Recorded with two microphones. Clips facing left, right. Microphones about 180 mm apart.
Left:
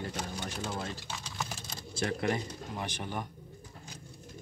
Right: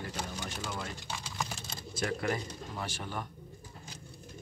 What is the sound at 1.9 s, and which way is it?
Speech, 25° left (ahead or behind).